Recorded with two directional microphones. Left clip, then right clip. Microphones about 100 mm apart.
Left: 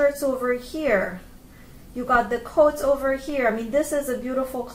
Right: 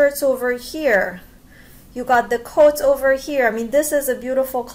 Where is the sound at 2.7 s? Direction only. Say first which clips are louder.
Right 6 dB; 15° right (ahead or behind).